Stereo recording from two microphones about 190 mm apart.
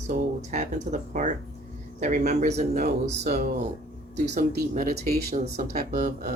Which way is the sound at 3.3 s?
50° right (ahead or behind).